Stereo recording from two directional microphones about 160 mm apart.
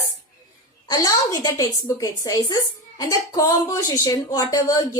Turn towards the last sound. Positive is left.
turn(degrees=25)  # may be behind; listen again after turning